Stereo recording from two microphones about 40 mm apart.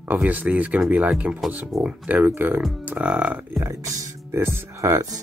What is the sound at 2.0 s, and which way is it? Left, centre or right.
Speech, right.